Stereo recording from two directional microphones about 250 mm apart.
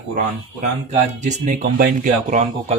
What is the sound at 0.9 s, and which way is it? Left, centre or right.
Speech, right.